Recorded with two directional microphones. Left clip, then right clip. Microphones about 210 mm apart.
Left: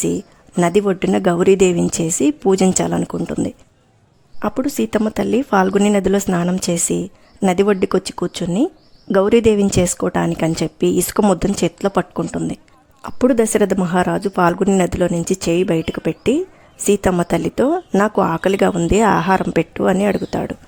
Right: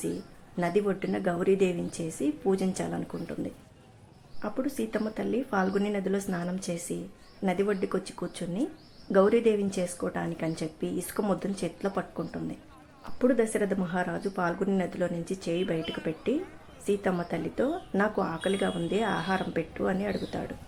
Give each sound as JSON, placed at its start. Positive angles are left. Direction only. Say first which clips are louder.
{"t": 0.5, "sound": "speech", "louder": "left 12 dB", "side_deg": 45}